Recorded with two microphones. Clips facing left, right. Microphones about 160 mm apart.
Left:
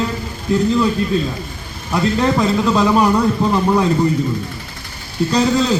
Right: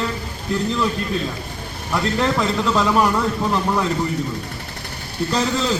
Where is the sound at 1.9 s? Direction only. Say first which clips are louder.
Left 4 dB; 15° left (ahead or behind).